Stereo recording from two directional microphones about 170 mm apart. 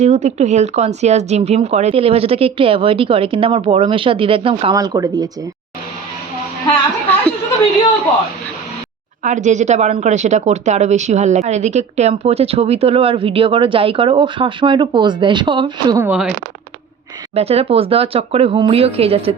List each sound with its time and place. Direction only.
0.0 s speech: 40° right (ahead or behind); by 5.3 s 20° right (ahead or behind)
9.2 s speech: 45° right (ahead or behind); by 16.0 s 25° right (ahead or behind)
16.0 s speech: 5° right (ahead or behind)
17.3 s speech: 35° right (ahead or behind)